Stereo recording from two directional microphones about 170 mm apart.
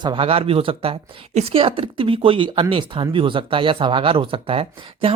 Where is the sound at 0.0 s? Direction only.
30° right (ahead or behind).